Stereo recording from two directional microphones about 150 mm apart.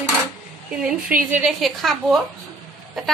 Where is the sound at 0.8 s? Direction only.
5° right (ahead or behind).